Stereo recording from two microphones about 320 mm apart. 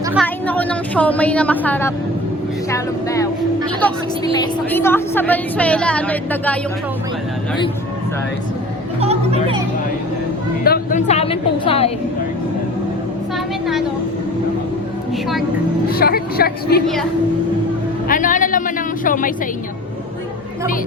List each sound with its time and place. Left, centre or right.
0.1 s a woman's voice: centre
4.4 s a woman's voice: centre
9.0 s speech: centre
10.6 s a woman's voice: left
15.9 s a woman's voice: left
18.1 s a woman's voice: left